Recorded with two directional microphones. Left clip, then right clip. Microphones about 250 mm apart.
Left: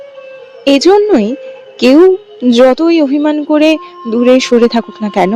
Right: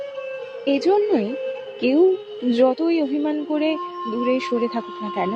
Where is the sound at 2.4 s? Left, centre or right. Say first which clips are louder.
Left 11 dB; left.